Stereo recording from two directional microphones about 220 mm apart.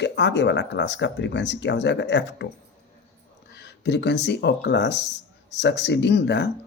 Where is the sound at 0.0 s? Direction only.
55° left (ahead or behind).